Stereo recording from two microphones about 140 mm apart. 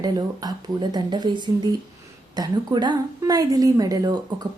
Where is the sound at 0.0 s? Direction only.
30° right (ahead or behind).